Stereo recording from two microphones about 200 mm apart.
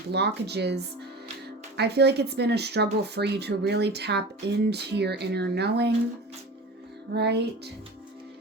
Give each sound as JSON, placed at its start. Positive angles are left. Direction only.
{"t": 0.1, "sound": "speech", "side_deg": -55}
{"t": 7.1, "sound": "speech", "side_deg": -55}